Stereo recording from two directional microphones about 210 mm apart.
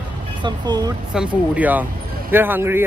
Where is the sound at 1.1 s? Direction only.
5° right (ahead or behind).